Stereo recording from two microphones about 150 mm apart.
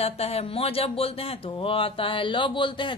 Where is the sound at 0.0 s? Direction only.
40° left (ahead or behind).